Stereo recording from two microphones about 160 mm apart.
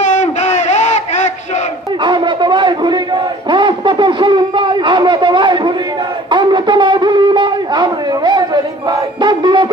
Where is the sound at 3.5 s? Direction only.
30° right (ahead or behind).